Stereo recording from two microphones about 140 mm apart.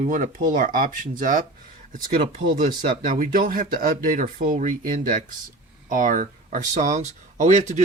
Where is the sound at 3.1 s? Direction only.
80° right; by 7.7 s 55° right (ahead or behind).